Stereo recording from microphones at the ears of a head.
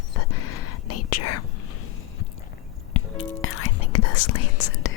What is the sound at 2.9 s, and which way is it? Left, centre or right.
Whispering, left.